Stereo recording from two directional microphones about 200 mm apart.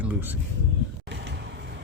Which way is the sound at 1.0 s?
55° right (ahead or behind).